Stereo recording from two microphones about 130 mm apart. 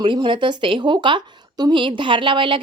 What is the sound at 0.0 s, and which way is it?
Speech, 40° right (ahead or behind).